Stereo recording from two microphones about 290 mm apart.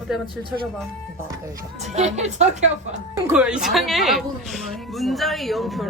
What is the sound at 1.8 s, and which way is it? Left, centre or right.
Speech, right.